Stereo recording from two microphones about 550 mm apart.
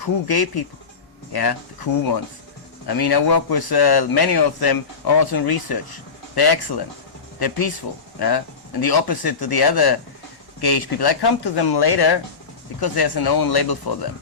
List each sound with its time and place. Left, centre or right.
0.0 s speech: left
8.8 s speech: left